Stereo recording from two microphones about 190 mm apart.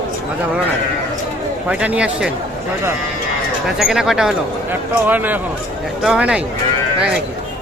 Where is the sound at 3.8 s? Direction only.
Centre (ahead or behind).